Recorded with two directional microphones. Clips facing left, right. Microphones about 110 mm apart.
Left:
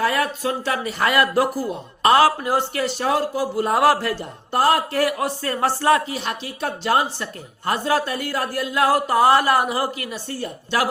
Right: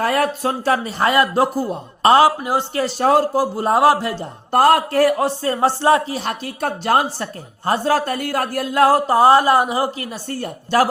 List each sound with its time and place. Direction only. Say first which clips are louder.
0.0 s speech: right 3 dB; 45° right (ahead or behind); by 2.6 s 20° right (ahead or behind)
2.7 s speech: right 5 dB; 40° right (ahead or behind); by 4.3 s 25° right (ahead or behind)
4.5 s speech: right 5 dB; 50° right (ahead or behind)
7.6 s speech: right 3 dB; 35° right (ahead or behind)
10.2 s a woman's voice: right 3 dB; 45° right (ahead or behind)